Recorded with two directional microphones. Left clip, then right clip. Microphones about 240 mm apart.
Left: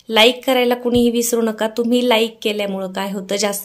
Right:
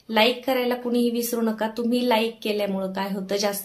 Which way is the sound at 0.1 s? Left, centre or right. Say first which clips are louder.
Left 7 dB; left.